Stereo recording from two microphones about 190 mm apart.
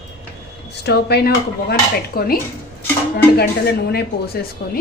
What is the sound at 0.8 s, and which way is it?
A woman's voice, 60° left (ahead or behind).